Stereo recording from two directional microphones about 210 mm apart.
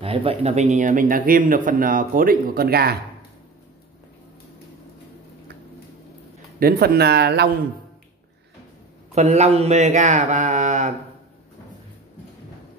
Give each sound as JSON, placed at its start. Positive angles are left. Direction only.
{"t": 0.0, "sound": "a man's voice", "side_deg": -25}
{"t": 6.6, "sound": "speech", "side_deg": -50}
{"t": 9.1, "sound": "a man's voice", "side_deg": -30}